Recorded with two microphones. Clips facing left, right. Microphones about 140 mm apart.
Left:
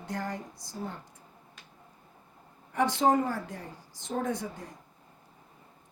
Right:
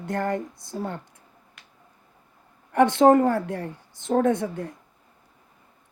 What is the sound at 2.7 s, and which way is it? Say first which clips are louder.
A woman's voice: right 9 dB; 60° right (ahead or behind).